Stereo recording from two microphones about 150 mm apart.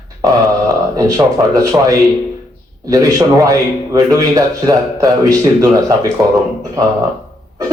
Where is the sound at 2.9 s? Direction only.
25° right (ahead or behind).